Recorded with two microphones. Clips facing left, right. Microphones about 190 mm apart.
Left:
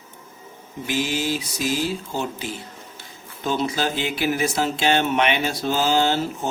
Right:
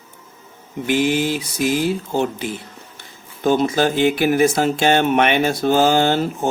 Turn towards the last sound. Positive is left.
turn(degrees=-55)  # may be behind; listen again after turning